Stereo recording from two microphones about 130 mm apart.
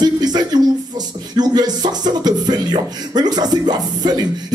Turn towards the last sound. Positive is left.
turn(degrees=-30)  # may be behind; listen again after turning